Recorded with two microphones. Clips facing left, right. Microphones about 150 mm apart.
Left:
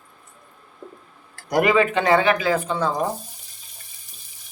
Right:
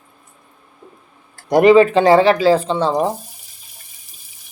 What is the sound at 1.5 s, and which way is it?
A man's voice, 25° right (ahead or behind).